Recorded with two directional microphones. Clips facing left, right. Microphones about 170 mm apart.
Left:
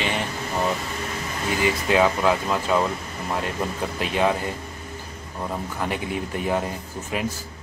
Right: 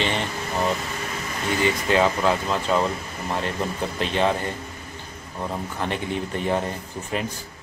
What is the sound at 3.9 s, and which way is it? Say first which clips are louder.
Speech: even; 10° left (ahead or behind).